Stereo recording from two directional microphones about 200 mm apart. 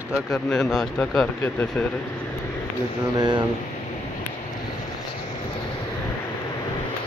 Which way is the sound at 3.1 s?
20° right (ahead or behind).